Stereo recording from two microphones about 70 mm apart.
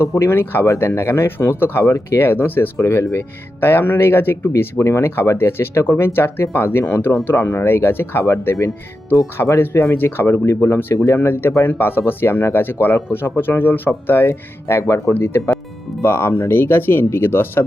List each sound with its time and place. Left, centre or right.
0.0 s speech: left
10.9 s speech: left
11.2 s speech: left
15.1 s speech: left